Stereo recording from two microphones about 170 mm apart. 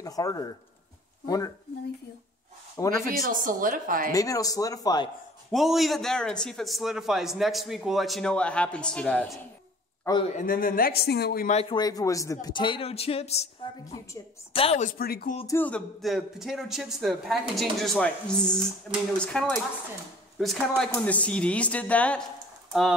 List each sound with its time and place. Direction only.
0.0 s speech: 20° left (ahead or behind)
3.1 s speech: 50° right (ahead or behind)
4.1 s speech: 20° left (ahead or behind)
5.5 s speech: centre (ahead or behind)
10.2 s speech: 50° left (ahead or behind); by 11.4 s 70° left (ahead or behind)
11.7 s speech: 20° left (ahead or behind); by 13.5 s 40° left (ahead or behind)
14.5 s speech: 35° left (ahead or behind); by 15.3 s 65° left (ahead or behind)
15.4 s a woman's voice: 10° left (ahead or behind)